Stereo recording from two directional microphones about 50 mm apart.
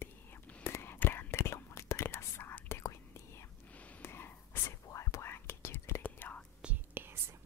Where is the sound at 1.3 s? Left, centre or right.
Left.